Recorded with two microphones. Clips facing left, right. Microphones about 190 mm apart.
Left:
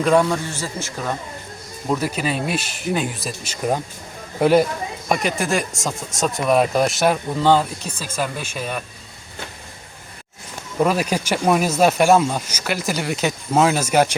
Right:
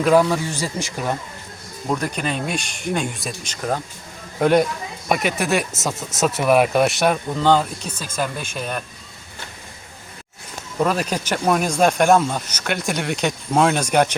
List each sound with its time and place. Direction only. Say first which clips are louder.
0.0 s speech: right 1 dB; centre (ahead or behind)
0.5 s speech: right 2 dB; 15° right (ahead or behind)
1.9 s speech: left 2 dB; 5° left (ahead or behind)
10.8 s speech: left 2 dB; 10° left (ahead or behind)